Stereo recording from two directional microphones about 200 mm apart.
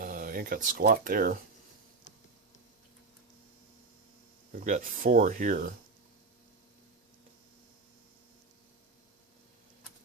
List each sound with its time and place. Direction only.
0.0 s speech: 45° right (ahead or behind)
4.5 s speech: 40° right (ahead or behind)